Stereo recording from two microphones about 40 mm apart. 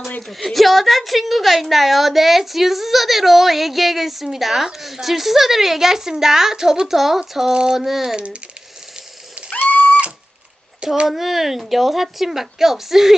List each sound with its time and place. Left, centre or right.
0.2 s a woman's voice: centre
7.5 s speech: right
7.8 s a woman's voice: centre
8.1 s speech: right
9.6 s cat: left
11.1 s a woman's voice: centre